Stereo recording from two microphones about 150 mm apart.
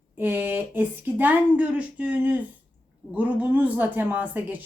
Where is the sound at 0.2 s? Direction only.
10° right (ahead or behind).